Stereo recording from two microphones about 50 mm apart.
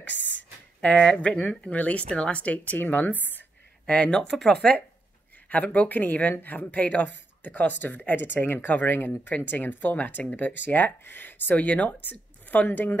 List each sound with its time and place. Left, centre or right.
0.9 s speech: centre
1.2 s speech: centre; by 3.4 s left
3.8 s speech: left
5.5 s speech: left